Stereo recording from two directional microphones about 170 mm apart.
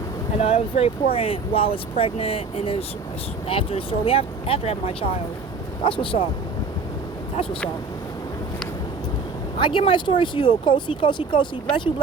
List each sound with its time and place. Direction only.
0.3 s speech: 35° left (ahead or behind)
9.6 s speech: 30° left (ahead or behind)